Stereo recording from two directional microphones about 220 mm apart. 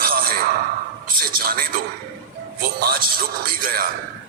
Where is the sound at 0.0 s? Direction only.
40° right (ahead or behind).